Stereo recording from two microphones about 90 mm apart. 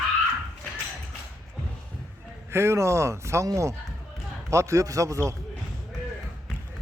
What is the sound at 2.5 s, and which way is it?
Speech, 30° right (ahead or behind).